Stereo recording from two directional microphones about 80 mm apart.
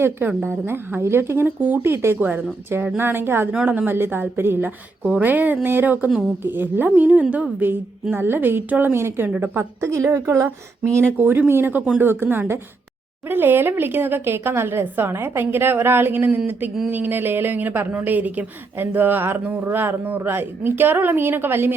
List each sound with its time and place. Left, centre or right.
0.0 s speech: right
3.5 s a woman's voice: centre